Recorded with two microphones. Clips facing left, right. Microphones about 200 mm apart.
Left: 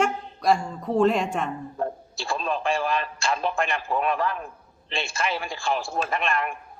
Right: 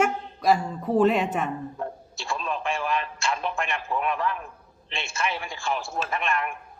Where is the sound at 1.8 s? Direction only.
35° left (ahead or behind).